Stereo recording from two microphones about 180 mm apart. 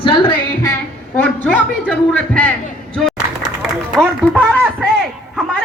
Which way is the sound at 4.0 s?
5° left (ahead or behind).